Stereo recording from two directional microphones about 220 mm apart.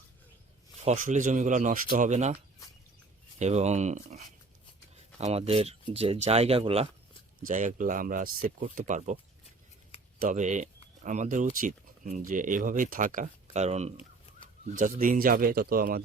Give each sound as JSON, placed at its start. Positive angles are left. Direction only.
{"t": 0.8, "sound": "speech", "side_deg": -30}
{"t": 3.3, "sound": "speech", "side_deg": -30}
{"t": 7.4, "sound": "speech", "side_deg": -35}
{"t": 9.9, "sound": "a sound", "side_deg": 25}
{"t": 10.2, "sound": "speech", "side_deg": -35}